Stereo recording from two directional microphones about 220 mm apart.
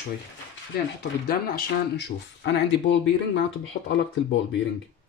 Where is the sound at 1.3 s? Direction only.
40° left (ahead or behind).